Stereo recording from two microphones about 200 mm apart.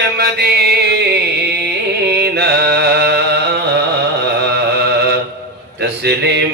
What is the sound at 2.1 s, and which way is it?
Carnatic music, 55° right (ahead or behind).